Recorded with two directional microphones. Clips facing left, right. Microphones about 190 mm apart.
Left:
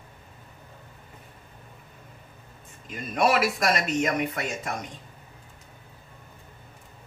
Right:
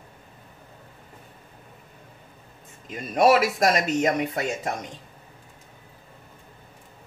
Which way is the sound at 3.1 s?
40° right (ahead or behind).